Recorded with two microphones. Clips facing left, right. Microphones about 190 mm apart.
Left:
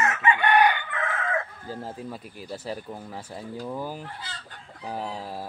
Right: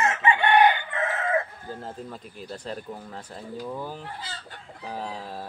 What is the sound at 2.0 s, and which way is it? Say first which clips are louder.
Speech: left 2 dB; 10° left (ahead or behind).